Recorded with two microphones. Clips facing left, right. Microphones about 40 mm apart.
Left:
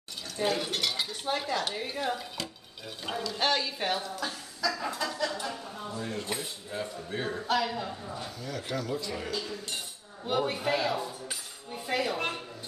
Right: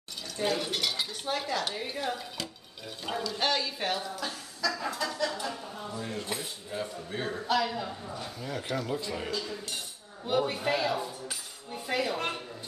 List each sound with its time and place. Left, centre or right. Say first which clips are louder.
0.4 s speech: left 1 dB; centre
4.9 s a sound: even; centre
5.4 s speech: even; centre
8.7 s speech: even; right
10.2 s speech: right 1 dB; centre